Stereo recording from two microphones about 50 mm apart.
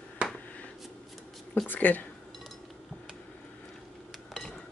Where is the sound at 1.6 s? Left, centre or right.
Left.